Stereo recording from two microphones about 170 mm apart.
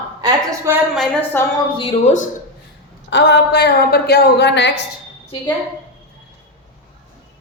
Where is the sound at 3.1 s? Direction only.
90° left.